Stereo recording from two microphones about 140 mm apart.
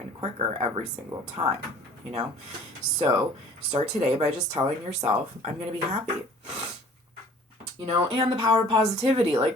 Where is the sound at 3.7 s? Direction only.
50° right (ahead or behind).